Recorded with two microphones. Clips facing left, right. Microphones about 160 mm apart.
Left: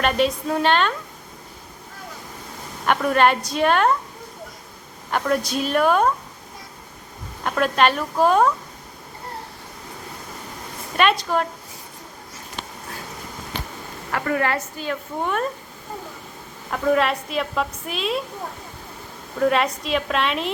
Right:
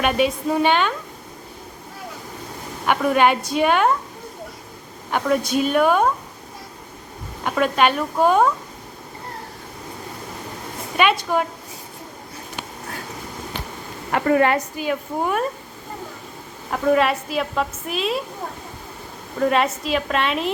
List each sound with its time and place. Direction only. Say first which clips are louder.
0.0 s a woman's voice: right 1 dB; 5° right (ahead or behind)
2.8 s a woman's voice: right 1 dB; 5° right (ahead or behind)
5.1 s a woman's voice: right 2 dB; 5° right (ahead or behind)
7.4 s a woman's voice: right 1 dB; 5° right (ahead or behind)
10.9 s a woman's voice: right 1 dB; 5° right (ahead or behind)
14.1 s a woman's voice: right 5 dB; 25° right (ahead or behind); by 15.4 s 5° right (ahead or behind)
16.7 s a woman's voice: right 2 dB; centre (ahead or behind)
19.4 s a woman's voice: right 1 dB; centre (ahead or behind)